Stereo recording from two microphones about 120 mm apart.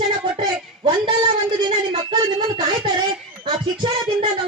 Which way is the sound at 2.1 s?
35° right (ahead or behind).